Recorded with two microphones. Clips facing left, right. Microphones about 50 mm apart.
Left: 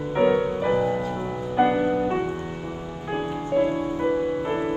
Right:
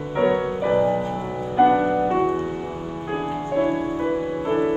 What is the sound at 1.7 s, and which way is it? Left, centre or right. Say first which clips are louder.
Music: right 3 dB; centre.